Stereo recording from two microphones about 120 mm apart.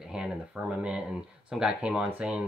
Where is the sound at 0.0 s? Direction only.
5° right (ahead or behind).